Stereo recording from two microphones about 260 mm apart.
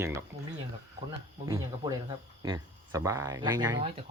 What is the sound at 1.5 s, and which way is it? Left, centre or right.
Speech, centre.